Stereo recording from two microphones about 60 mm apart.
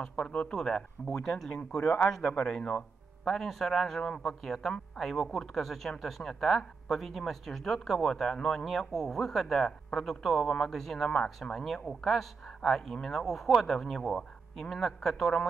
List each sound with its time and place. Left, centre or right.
0.0 s speech: centre